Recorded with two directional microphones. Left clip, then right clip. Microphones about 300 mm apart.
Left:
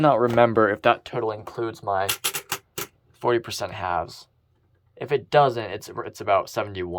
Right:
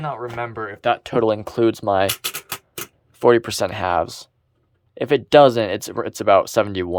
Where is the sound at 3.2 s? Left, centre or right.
Centre.